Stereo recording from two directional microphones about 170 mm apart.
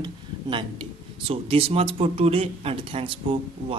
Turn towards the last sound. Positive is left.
turn(degrees=-30)  # may be behind; listen again after turning